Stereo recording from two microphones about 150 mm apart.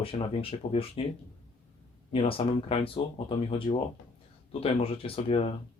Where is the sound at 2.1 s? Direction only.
40° left (ahead or behind).